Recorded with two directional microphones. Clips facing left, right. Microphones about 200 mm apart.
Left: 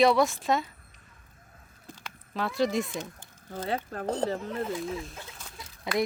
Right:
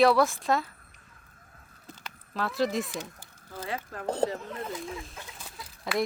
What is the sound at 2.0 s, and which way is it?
Speech, centre (ahead or behind).